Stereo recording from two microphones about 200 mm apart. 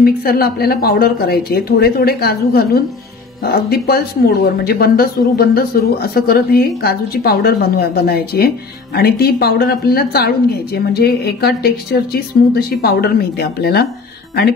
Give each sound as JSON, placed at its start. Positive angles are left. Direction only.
{"t": 0.0, "sound": "speech", "side_deg": 50}